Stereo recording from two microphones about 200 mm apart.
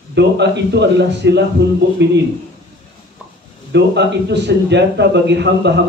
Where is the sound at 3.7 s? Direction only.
60° right (ahead or behind).